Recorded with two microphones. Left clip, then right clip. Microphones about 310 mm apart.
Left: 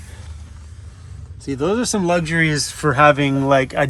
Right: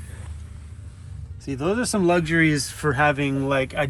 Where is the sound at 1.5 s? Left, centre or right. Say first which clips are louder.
Left 4 dB; centre.